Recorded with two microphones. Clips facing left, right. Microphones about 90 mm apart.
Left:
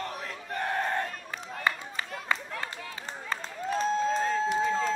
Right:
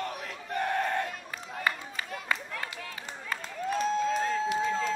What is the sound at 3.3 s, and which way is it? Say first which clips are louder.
Applause: even; 35° left (ahead or behind).